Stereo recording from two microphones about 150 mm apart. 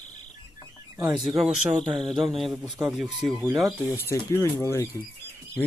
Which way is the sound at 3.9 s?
15° left (ahead or behind).